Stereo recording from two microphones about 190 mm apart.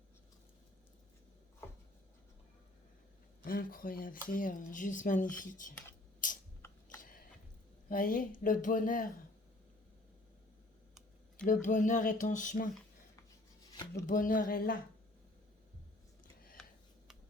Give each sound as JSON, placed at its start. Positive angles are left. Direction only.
{"t": 3.4, "sound": "speech", "side_deg": 50}
{"t": 6.2, "sound": "a sound", "side_deg": 45}
{"t": 7.9, "sound": "speech", "side_deg": 50}
{"t": 11.4, "sound": "speech", "side_deg": 45}
{"t": 14.1, "sound": "speech", "side_deg": 45}